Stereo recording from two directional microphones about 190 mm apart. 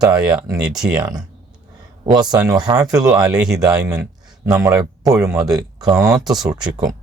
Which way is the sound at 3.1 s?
5° right (ahead or behind).